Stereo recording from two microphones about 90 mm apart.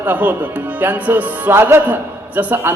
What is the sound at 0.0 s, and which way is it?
Speech, 20° right (ahead or behind).